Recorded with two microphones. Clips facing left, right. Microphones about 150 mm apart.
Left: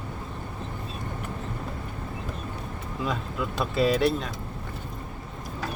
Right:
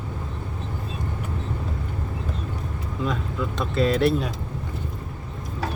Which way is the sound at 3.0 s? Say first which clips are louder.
Right 3 dB; 5° left (ahead or behind).